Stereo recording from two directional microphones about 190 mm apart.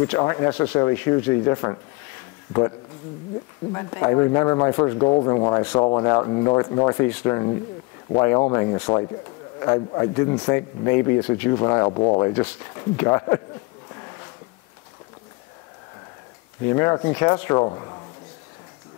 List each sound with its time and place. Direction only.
0.0 s speech: 15° left (ahead or behind)
3.7 s speech: 20° left (ahead or behind)
16.6 s speech: 15° left (ahead or behind)